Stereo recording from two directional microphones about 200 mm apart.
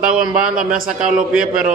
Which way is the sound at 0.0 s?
5° right (ahead or behind).